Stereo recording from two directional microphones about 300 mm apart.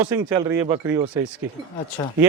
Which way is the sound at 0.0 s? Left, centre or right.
Centre.